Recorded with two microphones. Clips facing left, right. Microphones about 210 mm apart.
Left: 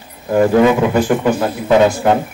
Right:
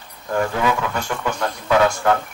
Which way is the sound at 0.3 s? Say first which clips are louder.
Left 10 dB; 25° left (ahead or behind).